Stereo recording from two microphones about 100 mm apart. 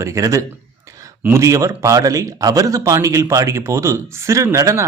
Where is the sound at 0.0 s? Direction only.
30° right (ahead or behind).